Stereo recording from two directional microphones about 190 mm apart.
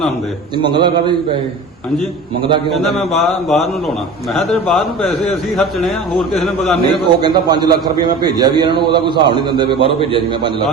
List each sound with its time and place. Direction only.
0.5 s a man's voice: 25° right (ahead or behind)
2.7 s speech: centre (ahead or behind)
6.8 s a man's voice: 25° right (ahead or behind)